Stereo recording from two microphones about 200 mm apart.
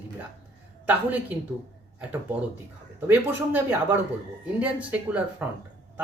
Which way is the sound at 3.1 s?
10° right (ahead or behind).